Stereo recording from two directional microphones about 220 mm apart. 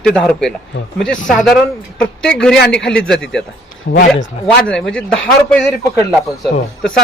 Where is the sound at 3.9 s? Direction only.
45° left (ahead or behind).